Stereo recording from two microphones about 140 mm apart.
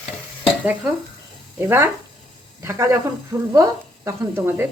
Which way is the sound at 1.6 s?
15° right (ahead or behind).